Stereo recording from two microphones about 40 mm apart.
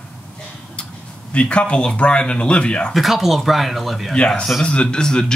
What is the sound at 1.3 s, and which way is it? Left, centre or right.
Speech, left.